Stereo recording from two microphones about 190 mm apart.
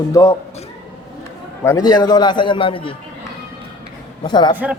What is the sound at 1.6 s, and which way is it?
A man's voice, 15° left (ahead or behind).